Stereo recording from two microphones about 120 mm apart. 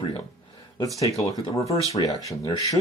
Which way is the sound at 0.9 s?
30° left (ahead or behind).